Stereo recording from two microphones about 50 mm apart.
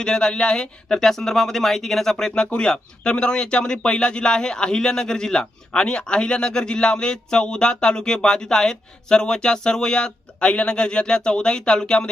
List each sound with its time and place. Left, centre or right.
0.0 s speech: centre